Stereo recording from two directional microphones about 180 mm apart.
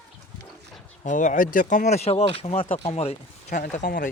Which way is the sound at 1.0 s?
45° left (ahead or behind).